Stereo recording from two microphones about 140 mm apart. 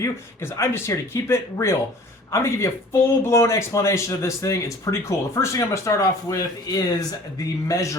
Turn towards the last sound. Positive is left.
turn(degrees=25)  # may be behind; listen again after turning